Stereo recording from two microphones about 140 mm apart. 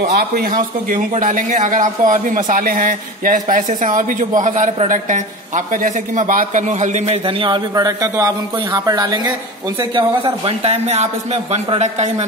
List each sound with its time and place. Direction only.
0.1 s a man's voice: 80° right; by 7.2 s 60° right (ahead or behind)
7.2 s speech: 35° right (ahead or behind)
9.9 s speech: 40° right (ahead or behind)